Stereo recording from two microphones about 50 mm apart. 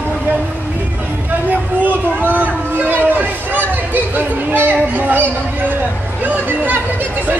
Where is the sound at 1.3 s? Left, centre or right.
Right.